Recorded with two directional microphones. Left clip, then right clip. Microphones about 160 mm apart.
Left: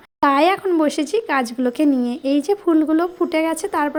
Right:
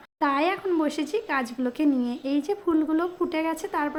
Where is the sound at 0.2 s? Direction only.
40° left (ahead or behind).